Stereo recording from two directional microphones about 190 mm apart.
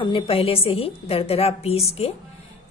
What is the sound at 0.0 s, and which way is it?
A woman's voice, 30° left (ahead or behind).